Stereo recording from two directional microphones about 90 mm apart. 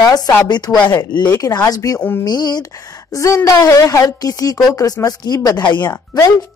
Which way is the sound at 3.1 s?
35° left (ahead or behind).